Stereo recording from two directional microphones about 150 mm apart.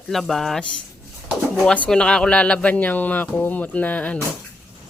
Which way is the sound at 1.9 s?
5° left (ahead or behind).